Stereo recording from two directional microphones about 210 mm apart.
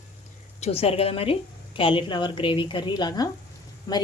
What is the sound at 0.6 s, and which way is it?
A woman's voice, 30° left (ahead or behind).